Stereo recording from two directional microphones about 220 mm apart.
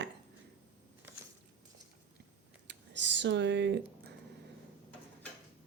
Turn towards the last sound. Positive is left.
turn(degrees=-55)  # may be behind; listen again after turning